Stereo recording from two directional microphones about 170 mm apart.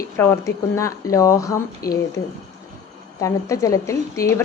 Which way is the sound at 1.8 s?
60° left (ahead or behind).